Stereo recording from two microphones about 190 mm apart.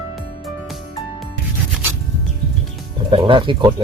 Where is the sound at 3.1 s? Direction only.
25° right (ahead or behind).